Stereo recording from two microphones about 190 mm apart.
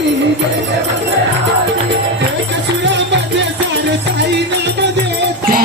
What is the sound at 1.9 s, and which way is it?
Music, 70° right (ahead or behind).